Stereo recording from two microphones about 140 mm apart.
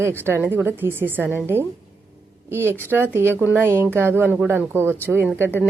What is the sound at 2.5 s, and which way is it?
Speech, 15° right (ahead or behind).